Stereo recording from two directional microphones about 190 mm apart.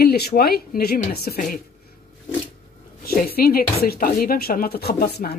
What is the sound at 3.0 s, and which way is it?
Speech, 55° left (ahead or behind).